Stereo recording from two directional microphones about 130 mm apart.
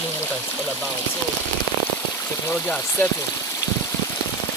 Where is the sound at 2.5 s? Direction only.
15° left (ahead or behind).